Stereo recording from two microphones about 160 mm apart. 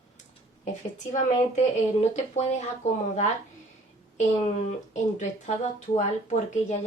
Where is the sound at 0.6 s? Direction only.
50° left (ahead or behind).